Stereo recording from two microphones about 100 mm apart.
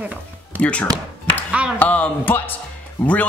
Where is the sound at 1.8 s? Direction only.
15° left (ahead or behind).